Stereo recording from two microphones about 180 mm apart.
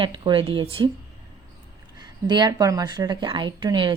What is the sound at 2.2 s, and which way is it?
Speech, 25° right (ahead or behind).